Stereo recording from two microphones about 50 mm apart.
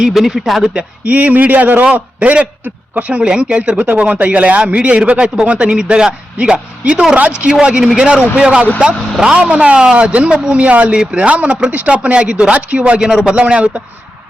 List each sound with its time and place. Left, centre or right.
0.0 s speech: centre
0.7 s a man's voice: right
3.8 s a man's voice: right
13.0 s a man's voice: centre
13.3 s a man's voice: right